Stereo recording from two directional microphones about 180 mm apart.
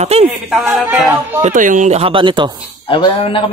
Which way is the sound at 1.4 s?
45° right (ahead or behind).